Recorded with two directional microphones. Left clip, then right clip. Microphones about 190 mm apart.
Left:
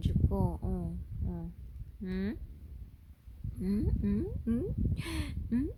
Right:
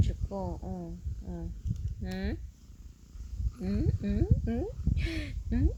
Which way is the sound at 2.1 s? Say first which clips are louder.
Right 1 dB; 35° left (ahead or behind).